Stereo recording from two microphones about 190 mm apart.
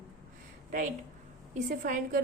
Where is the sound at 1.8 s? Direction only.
45° right (ahead or behind).